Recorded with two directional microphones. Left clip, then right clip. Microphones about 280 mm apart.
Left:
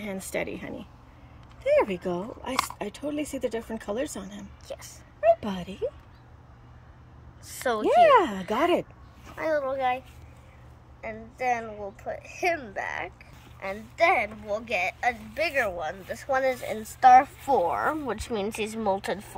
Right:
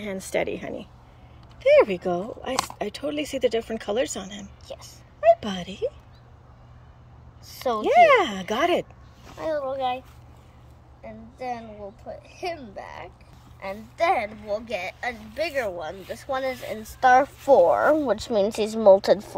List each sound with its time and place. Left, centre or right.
0.0 s speech: centre
7.4 s a woman's voice: centre
18.1 s speech: right